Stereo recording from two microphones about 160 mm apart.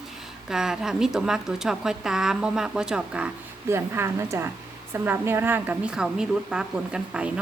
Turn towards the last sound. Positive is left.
turn(degrees=-5)  # may be behind; listen again after turning